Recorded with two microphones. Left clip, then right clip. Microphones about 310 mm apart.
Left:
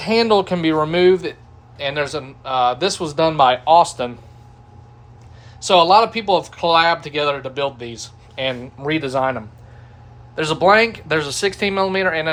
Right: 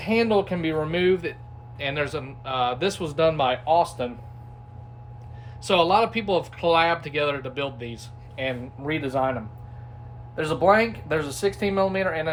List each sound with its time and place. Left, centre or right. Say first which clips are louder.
0.0 s speech: left 6 dB; left
5.5 s speech: left 8 dB; centre; by 9.3 s left
10.3 s speech: left 6 dB; left